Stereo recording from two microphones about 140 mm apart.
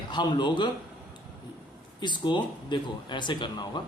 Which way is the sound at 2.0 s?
35° left (ahead or behind).